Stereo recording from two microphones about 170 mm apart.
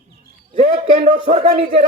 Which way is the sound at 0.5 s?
35° right (ahead or behind).